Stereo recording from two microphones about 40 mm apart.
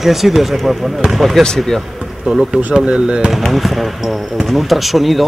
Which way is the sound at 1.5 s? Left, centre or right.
Centre.